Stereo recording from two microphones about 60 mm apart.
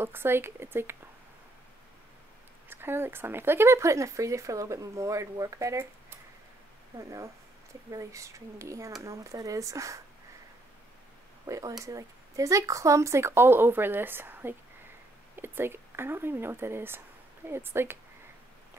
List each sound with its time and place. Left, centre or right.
0.0 s speech: right
2.7 s speech: right
7.0 s speech: right
11.4 s speech: right